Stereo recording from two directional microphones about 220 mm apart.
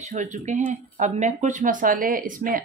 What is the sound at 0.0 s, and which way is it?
Speech, 35° right (ahead or behind).